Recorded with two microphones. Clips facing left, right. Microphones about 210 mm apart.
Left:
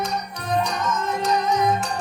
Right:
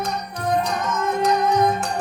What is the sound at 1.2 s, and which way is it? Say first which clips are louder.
Music: right 4 dB; 60° right (ahead or behind).